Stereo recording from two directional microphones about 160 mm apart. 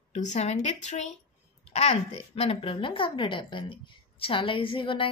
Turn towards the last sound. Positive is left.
turn(degrees=30)  # may be behind; listen again after turning